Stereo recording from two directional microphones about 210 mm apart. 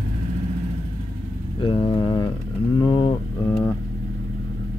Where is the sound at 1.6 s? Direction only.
25° left (ahead or behind).